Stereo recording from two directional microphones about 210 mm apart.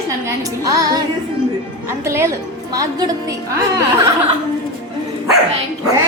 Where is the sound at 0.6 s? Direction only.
15° right (ahead or behind).